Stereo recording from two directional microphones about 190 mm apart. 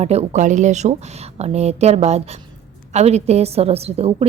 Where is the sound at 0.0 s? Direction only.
35° right (ahead or behind).